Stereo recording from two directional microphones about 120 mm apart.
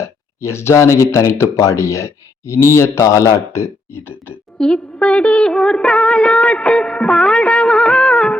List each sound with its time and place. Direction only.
0.0 s speech: 25° left (ahead or behind)
4.5 s music: 5° left (ahead or behind)